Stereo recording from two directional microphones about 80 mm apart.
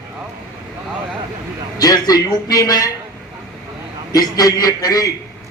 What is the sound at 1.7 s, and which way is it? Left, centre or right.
A man's voice, left.